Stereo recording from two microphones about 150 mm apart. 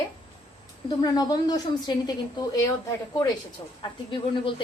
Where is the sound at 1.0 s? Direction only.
25° left (ahead or behind).